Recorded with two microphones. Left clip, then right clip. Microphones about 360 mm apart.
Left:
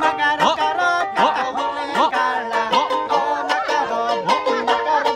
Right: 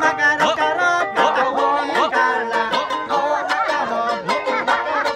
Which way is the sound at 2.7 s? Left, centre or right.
Left.